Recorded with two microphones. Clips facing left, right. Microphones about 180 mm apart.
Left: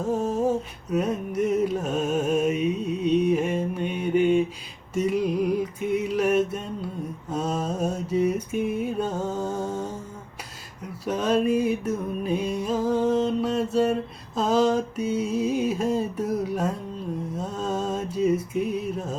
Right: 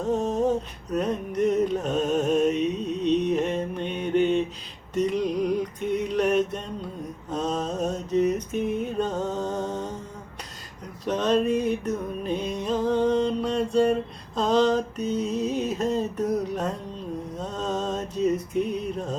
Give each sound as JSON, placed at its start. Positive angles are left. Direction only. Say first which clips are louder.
{"t": 0.0, "sound": "music", "louder": "even", "side_deg": 10}
{"t": 7.3, "sound": "mantra", "louder": "even", "side_deg": 10}
{"t": 11.0, "sound": "music", "louder": "even", "side_deg": 10}
{"t": 14.3, "sound": "a sound", "louder": "even", "side_deg": 5}
{"t": 17.3, "sound": "music", "louder": "even", "side_deg": 10}